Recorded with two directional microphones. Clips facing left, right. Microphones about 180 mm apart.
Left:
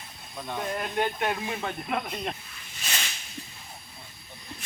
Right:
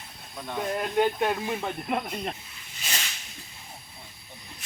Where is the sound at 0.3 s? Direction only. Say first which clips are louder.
Right 2 dB; centre (ahead or behind).